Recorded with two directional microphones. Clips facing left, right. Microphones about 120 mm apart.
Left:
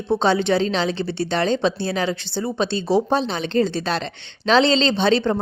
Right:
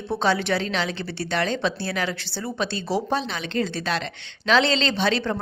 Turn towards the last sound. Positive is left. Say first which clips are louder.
# left 5 dB
turn(degrees=25)  # may be behind; listen again after turning